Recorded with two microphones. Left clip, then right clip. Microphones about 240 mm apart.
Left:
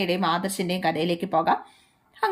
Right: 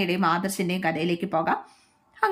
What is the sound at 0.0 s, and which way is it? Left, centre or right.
A woman's voice, centre.